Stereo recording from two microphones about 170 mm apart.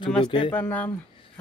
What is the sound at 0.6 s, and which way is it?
Speech, 10° left (ahead or behind).